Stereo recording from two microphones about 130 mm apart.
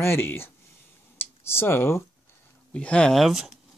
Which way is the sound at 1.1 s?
20° left (ahead or behind).